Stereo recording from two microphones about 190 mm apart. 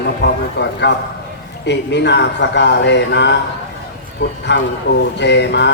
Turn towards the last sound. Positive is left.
turn(degrees=70)  # may be behind; listen again after turning